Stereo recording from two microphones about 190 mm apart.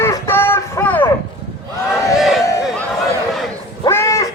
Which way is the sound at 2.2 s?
Centre (ahead or behind).